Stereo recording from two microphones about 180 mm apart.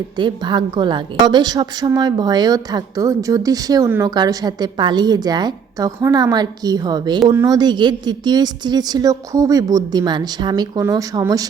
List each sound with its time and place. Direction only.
0.2 s a woman's voice: 25° right (ahead or behind)